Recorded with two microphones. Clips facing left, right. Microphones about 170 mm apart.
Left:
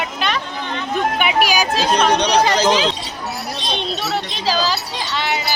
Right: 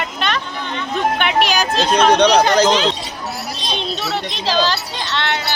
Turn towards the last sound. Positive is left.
turn(degrees=5)  # may be behind; listen again after turning